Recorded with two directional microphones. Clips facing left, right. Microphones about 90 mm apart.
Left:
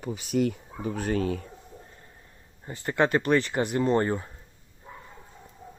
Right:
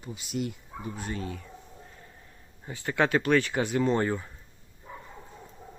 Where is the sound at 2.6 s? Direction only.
Centre (ahead or behind).